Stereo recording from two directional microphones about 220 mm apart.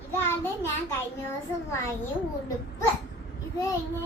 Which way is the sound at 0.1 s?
10° left (ahead or behind).